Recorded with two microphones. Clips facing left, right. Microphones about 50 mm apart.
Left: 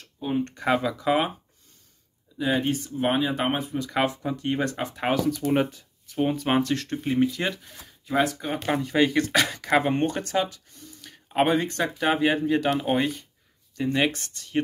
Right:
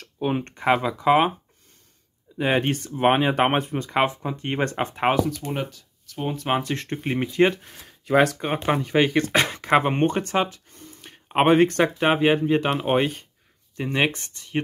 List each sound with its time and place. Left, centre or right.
0.0 s a sound: right
0.5 s speech: right
2.3 s speech: right
3.9 s speech: right
4.4 s speech: right
5.5 s speech: centre
6.1 s speech: centre
6.6 s speech: right
6.9 s speech: right
7.8 s speech: right
8.5 s speech: right
11.6 s speech: right
12.0 s speech: right
13.7 s speech: right